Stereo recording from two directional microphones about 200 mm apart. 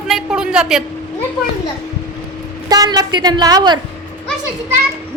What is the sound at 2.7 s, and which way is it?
A woman's voice, 20° right (ahead or behind).